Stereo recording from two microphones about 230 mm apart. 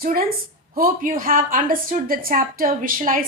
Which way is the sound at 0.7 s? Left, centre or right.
Right.